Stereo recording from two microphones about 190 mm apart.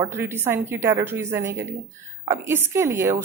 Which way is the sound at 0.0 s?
10° right (ahead or behind).